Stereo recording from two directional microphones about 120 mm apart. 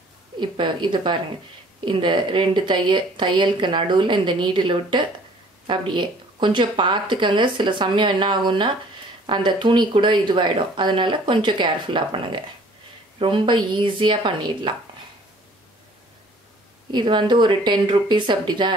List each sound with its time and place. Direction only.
0.4 s speech: 40° right (ahead or behind)
16.9 s speech: 40° right (ahead or behind)